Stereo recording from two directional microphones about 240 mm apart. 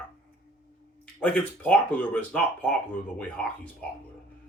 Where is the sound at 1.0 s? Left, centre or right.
Centre.